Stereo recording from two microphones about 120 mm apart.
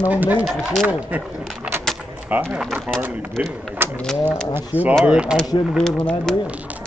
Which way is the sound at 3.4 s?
10° right (ahead or behind).